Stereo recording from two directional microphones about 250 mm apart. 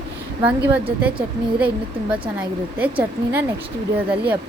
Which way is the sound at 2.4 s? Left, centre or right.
Centre.